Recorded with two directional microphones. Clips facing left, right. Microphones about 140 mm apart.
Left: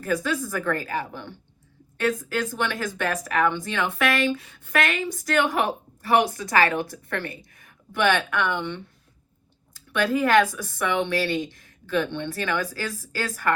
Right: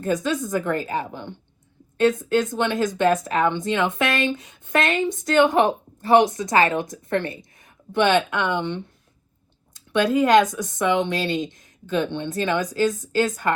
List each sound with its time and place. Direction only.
0.0 s a woman's voice: 20° right (ahead or behind)